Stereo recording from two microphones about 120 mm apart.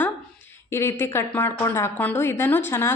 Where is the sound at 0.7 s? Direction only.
20° left (ahead or behind).